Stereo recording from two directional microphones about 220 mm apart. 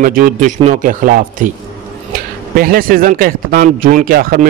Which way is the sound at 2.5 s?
40° right (ahead or behind).